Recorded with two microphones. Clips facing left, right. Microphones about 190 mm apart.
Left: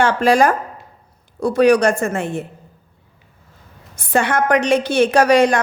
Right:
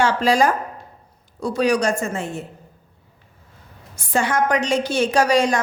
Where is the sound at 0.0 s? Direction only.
55° left (ahead or behind).